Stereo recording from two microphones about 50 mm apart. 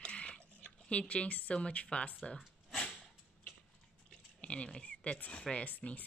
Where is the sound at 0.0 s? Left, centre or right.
Left.